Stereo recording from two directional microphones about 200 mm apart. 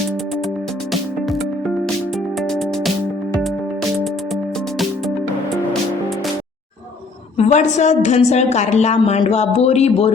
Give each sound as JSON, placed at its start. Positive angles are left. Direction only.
{"t": 7.3, "sound": "a woman's voice", "side_deg": 35}